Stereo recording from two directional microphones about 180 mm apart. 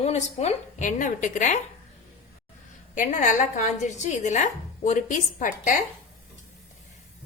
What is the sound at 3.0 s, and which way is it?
A woman's voice, 45° left (ahead or behind).